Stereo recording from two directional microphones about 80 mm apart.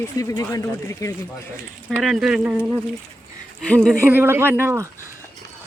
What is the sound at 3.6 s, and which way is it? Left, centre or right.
Speech, centre.